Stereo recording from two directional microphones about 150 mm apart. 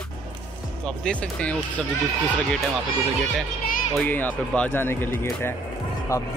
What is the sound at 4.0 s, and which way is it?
Speech, 10° left (ahead or behind).